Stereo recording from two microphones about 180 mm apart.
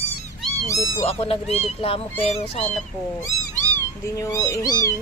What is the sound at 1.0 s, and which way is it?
Speech, 30° left (ahead or behind).